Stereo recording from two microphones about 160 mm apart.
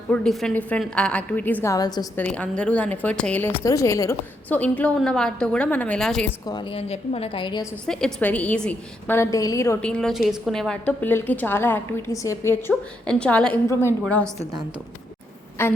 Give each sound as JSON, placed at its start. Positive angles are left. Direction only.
{"t": 0.1, "sound": "a woman's voice", "side_deg": 5}
{"t": 2.1, "sound": "a woman's voice", "side_deg": 10}
{"t": 6.4, "sound": "a woman's voice", "side_deg": 25}
{"t": 7.9, "sound": "a woman's voice", "side_deg": 5}
{"t": 9.8, "sound": "a woman's voice", "side_deg": 5}
{"t": 15.6, "sound": "a woman's voice", "side_deg": 15}